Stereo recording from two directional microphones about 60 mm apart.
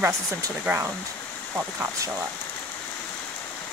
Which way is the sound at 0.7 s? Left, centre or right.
Centre.